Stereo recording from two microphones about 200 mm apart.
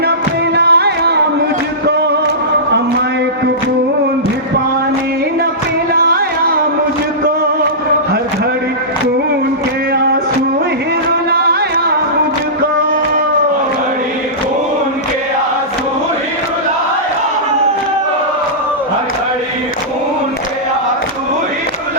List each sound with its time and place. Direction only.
0.5 s music: 55° right (ahead or behind)
5.9 s music: 50° right (ahead or behind)